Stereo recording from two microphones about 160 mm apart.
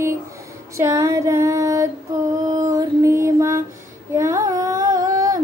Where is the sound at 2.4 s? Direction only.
20° right (ahead or behind).